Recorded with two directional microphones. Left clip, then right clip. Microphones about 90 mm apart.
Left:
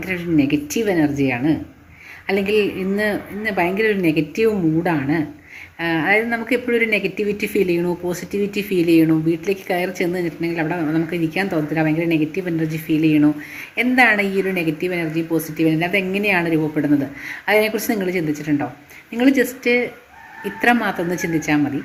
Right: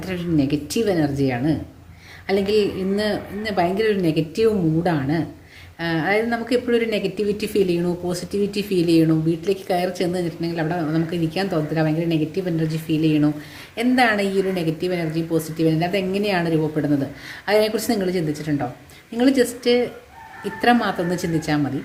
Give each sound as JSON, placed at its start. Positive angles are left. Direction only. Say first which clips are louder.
{"t": 0.0, "sound": "a woman's voice", "louder": "left 3 dB", "side_deg": -20}
{"t": 2.9, "sound": "a woman's voice", "louder": "left 2 dB", "side_deg": -15}
{"t": 16.7, "sound": "a woman's voice", "louder": "left 3 dB", "side_deg": -10}